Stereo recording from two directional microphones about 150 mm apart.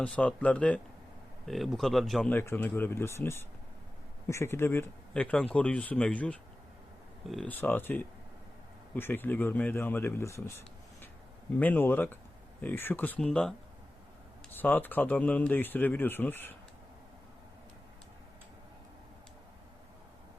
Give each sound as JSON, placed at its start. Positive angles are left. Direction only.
{"t": 0.0, "sound": "speech", "side_deg": 10}
{"t": 2.3, "sound": "speech", "side_deg": 15}
{"t": 7.5, "sound": "speech", "side_deg": 10}
{"t": 11.6, "sound": "speech", "side_deg": 10}
{"t": 14.5, "sound": "speech", "side_deg": 10}